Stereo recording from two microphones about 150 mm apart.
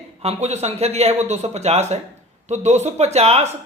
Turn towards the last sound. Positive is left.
turn(degrees=-45)  # may be behind; listen again after turning